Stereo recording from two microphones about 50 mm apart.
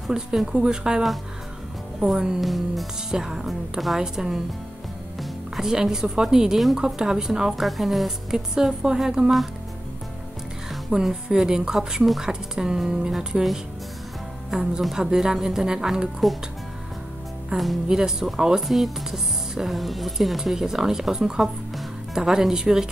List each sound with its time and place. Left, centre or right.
0.1 s a woman's voice: centre
3.2 s a woman's voice: centre
5.6 s a woman's voice: centre
10.9 s a woman's voice: centre
17.5 s a woman's voice: right